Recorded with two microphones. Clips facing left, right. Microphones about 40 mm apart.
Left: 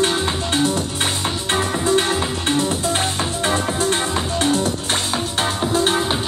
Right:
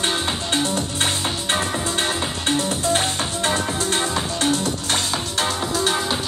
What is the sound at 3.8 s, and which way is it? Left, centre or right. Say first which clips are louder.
Music: left 2 dB; left.